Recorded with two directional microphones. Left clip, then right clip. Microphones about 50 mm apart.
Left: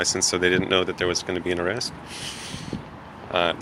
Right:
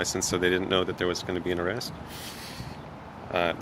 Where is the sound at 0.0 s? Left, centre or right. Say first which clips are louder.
Left 5 dB; centre.